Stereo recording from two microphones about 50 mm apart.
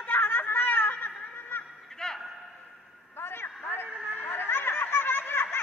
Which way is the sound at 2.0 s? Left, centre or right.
Centre.